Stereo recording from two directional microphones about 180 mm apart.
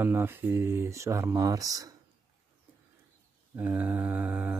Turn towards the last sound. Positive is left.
turn(degrees=-10)  # may be behind; listen again after turning